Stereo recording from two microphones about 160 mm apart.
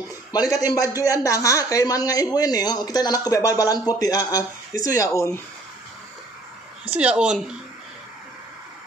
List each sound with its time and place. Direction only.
0.3 s a man's voice: 25° left (ahead or behind)
6.9 s a woman's voice: 10° right (ahead or behind)